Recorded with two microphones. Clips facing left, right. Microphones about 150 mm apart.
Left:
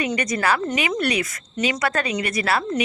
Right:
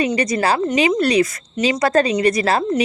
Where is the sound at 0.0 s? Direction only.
30° right (ahead or behind).